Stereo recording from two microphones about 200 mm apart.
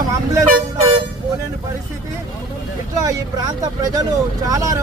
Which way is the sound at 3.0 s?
20° right (ahead or behind).